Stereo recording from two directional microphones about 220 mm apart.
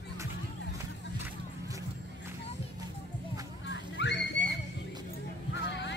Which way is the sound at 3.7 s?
55° left (ahead or behind).